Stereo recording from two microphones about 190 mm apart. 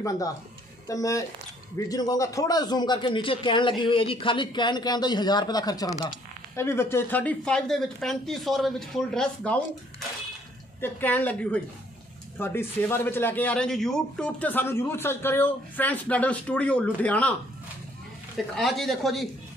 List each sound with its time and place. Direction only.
0.8 s a man's voice: 15° left (ahead or behind)
18.5 s speech: centre (ahead or behind)